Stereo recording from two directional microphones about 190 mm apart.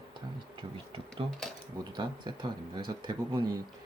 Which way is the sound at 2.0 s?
25° right (ahead or behind).